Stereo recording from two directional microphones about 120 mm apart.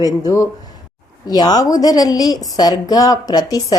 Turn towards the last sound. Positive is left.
turn(degrees=30)  # may be behind; listen again after turning